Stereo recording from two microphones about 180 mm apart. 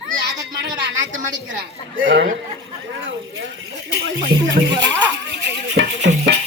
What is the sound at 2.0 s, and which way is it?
Speech, 85° right.